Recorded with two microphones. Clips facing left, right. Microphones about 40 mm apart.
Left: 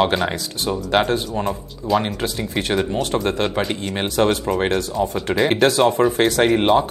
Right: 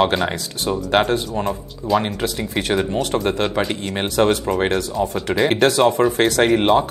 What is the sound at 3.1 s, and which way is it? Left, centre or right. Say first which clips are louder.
Speech: right 1 dB; centre.